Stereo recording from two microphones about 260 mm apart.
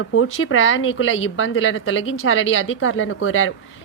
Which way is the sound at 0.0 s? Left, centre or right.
Left.